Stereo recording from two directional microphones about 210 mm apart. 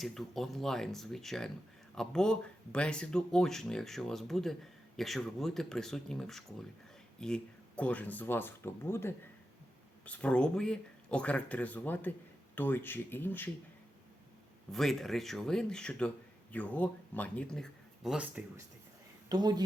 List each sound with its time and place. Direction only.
0.0 s speech: centre (ahead or behind)
14.7 s speech: centre (ahead or behind)
19.3 s speech: 20° right (ahead or behind)